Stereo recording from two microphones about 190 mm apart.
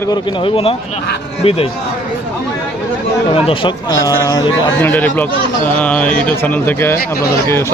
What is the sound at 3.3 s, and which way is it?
Speech, 25° left (ahead or behind).